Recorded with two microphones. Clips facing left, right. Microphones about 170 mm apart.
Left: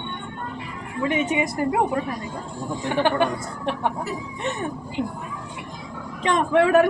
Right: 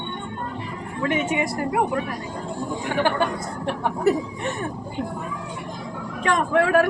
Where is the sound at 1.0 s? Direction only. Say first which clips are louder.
Left 1 dB; 20° left (ahead or behind).